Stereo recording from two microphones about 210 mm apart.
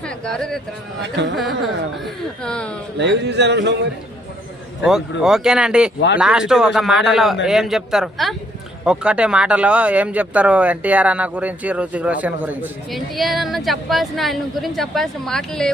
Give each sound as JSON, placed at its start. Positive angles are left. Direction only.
{"t": 0.0, "sound": "speech", "side_deg": 5}
{"t": 1.1, "sound": "speech", "side_deg": -55}
{"t": 2.0, "sound": "speech", "side_deg": 5}
{"t": 3.0, "sound": "speech", "side_deg": -55}
{"t": 4.8, "sound": "speech", "side_deg": 0}